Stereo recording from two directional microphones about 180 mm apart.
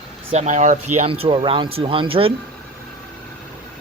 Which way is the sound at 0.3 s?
40° right (ahead or behind).